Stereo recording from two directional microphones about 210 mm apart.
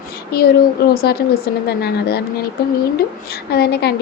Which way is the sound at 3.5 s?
50° left (ahead or behind).